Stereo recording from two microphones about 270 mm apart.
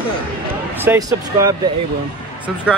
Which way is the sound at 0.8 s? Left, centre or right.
Centre.